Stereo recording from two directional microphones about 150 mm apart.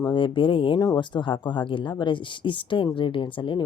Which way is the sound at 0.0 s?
35° left (ahead or behind).